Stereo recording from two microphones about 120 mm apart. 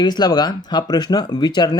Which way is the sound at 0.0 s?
35° left (ahead or behind).